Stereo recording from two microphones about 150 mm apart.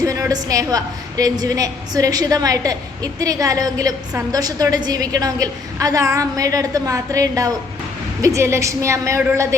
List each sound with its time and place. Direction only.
0.0 s a woman's voice: 20° right (ahead or behind)